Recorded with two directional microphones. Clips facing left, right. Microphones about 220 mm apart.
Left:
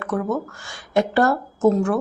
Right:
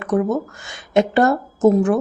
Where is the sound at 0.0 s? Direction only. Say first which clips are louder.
Right 5 dB; 20° right (ahead or behind).